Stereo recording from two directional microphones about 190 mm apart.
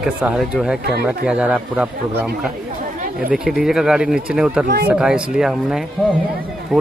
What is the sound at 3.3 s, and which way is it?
Speech, centre (ahead or behind).